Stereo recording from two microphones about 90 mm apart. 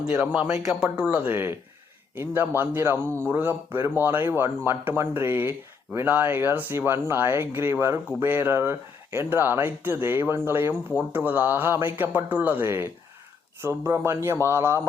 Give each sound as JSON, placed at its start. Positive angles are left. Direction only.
{"t": 0.1, "sound": "speech", "side_deg": -15}